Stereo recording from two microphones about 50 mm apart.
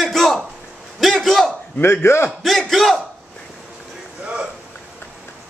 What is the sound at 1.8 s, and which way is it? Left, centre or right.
Speech, left.